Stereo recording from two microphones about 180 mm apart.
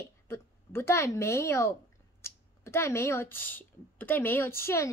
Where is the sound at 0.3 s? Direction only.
15° left (ahead or behind).